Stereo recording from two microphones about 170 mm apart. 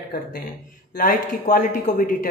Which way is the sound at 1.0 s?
50° left (ahead or behind).